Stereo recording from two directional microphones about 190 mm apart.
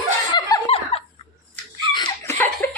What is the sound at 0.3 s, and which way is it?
Snicker, 25° left (ahead or behind).